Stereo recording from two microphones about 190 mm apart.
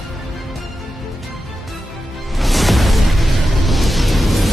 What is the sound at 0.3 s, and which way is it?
Music, centre (ahead or behind).